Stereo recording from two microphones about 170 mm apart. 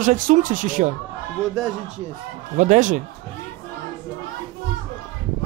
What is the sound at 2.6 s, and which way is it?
Speech, 50° right (ahead or behind).